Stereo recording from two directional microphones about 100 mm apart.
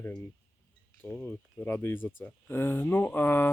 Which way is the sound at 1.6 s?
25° left (ahead or behind).